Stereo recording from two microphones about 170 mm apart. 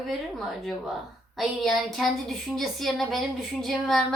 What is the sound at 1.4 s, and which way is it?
A woman's voice, centre (ahead or behind).